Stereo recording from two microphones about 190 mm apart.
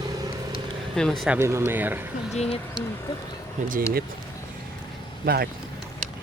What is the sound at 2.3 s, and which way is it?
Speech, 30° left (ahead or behind).